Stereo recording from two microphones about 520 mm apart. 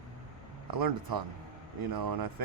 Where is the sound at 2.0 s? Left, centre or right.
Right.